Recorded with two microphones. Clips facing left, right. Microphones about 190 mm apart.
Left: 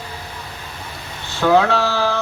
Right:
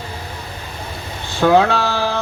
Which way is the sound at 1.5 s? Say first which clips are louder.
Even; 15° right (ahead or behind).